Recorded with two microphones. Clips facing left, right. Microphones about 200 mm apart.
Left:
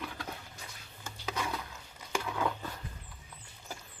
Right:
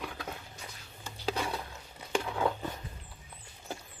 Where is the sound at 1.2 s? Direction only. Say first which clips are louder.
Right 3 dB; 30° right (ahead or behind).